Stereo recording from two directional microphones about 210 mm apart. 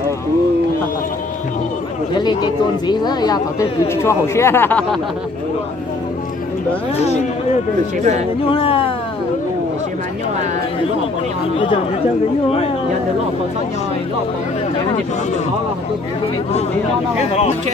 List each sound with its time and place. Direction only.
2.2 s speech: 20° left (ahead or behind)
8.5 s speech: 25° left (ahead or behind)
11.5 s speech: 25° left (ahead or behind)